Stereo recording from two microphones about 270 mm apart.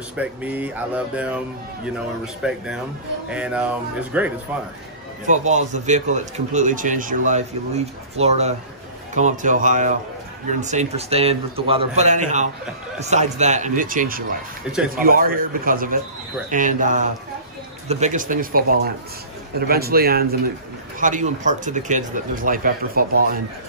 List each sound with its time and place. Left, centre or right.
0.1 s speech: centre
2.4 s speech: centre
5.2 s speech: right